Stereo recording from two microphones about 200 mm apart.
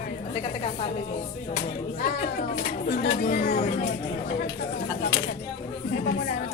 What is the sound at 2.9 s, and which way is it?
Speech, 45° left (ahead or behind).